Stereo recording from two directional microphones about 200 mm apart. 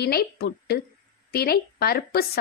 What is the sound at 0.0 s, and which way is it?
A woman's voice, 50° left (ahead or behind).